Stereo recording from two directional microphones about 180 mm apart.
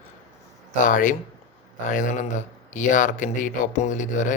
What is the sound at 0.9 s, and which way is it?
A man's voice, 45° left (ahead or behind).